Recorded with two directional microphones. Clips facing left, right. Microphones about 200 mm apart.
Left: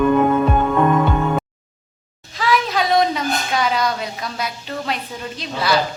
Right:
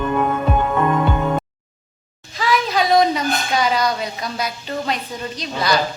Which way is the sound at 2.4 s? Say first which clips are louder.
Even; centre (ahead or behind).